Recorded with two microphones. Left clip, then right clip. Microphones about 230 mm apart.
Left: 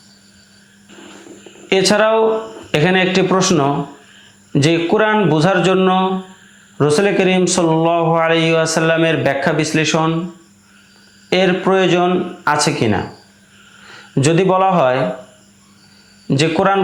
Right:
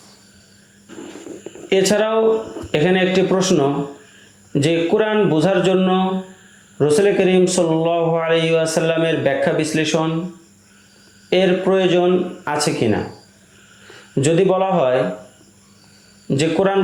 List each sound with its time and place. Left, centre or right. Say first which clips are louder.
1.7 s a man's voice: left 3 dB; left
11.3 s a man's voice: left 2 dB; left
14.2 s a man's voice: left 2 dB; left
16.3 s a man's voice: left 3 dB; left